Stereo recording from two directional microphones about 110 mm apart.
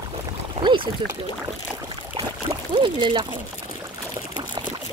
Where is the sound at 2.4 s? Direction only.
50° right (ahead or behind).